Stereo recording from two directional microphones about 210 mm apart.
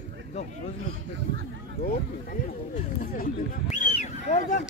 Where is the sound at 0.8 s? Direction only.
70° right (ahead or behind).